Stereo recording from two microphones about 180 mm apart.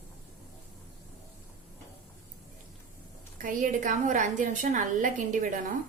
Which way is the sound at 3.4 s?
50° right (ahead or behind).